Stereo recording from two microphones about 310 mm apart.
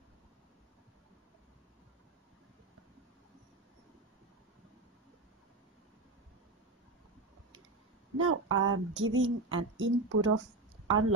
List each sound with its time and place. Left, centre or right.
8.2 s speech: right